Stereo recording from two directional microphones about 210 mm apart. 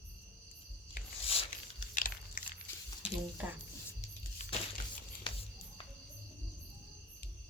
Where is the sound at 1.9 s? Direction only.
40° left (ahead or behind).